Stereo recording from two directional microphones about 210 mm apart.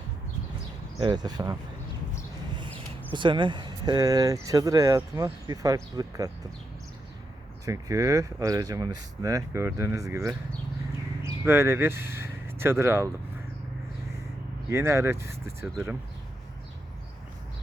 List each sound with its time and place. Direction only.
0.9 s speech: 20° right (ahead or behind)
2.6 s speech: 25° right (ahead or behind)
7.6 s speech: 15° right (ahead or behind)
14.7 s speech: 10° right (ahead or behind)